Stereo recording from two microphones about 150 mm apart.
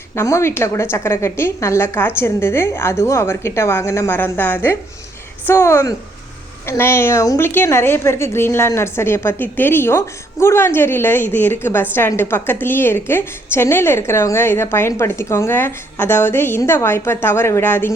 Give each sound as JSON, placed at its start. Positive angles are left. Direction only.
{"t": 0.2, "sound": "a woman's voice", "side_deg": 15}